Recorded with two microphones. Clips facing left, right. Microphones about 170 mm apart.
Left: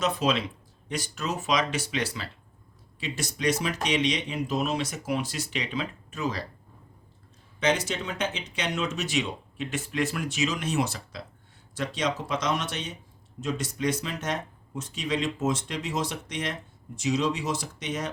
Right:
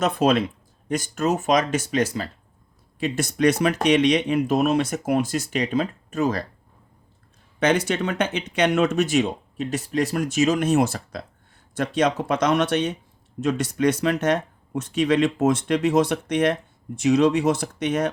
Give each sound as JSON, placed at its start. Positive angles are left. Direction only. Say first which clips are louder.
{"t": 0.0, "sound": "speech", "louder": "right 6 dB", "side_deg": -50}
{"t": 3.0, "sound": "speech", "louder": "right 9 dB", "side_deg": -55}
{"t": 7.6, "sound": "speech", "louder": "right 6 dB", "side_deg": -60}